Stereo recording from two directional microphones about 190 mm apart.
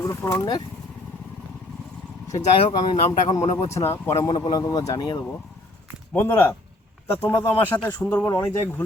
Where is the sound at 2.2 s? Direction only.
15° left (ahead or behind).